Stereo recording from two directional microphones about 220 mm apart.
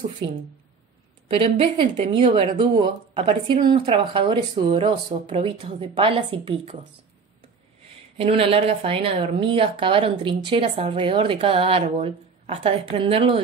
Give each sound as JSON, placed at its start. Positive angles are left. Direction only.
{"t": 1.3, "sound": "speech", "side_deg": -25}
{"t": 8.2, "sound": "speech", "side_deg": -25}